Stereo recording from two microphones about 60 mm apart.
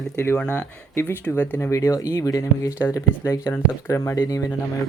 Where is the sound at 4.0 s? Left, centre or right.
Left.